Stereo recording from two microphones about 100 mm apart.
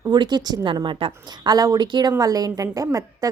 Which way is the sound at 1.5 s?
40° right (ahead or behind).